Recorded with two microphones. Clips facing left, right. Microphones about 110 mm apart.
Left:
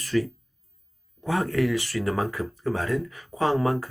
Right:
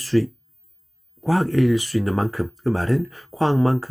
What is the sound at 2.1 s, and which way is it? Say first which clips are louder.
Speech: right 4 dB; 30° right (ahead or behind).